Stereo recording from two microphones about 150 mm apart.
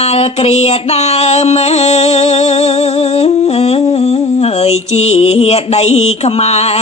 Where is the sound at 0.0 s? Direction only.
45° left (ahead or behind).